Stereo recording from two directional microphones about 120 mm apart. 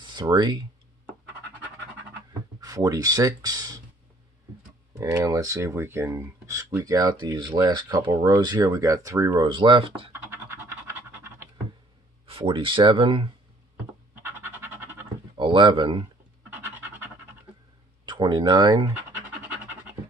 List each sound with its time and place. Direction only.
0.0 s speech: 35° right (ahead or behind)
2.6 s speech: 30° right (ahead or behind)
4.9 s speech: 25° right (ahead or behind)
8.1 s speech: 20° right (ahead or behind)
8.4 s speech: 35° right (ahead or behind)
9.4 s speech: 40° right (ahead or behind)
10.1 s scratch: 20° right (ahead or behind)
12.3 s speech: 45° right (ahead or behind)
14.1 s music: 20° right (ahead or behind)
15.3 s speech: 40° right (ahead or behind)
16.4 s scratch: 15° right (ahead or behind)
18.0 s speech: 40° right (ahead or behind)